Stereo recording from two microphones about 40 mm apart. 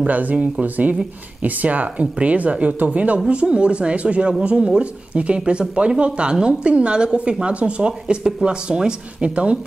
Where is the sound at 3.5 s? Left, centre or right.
Right.